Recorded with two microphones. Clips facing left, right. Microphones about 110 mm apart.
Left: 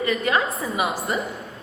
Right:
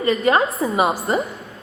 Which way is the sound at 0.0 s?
35° right (ahead or behind).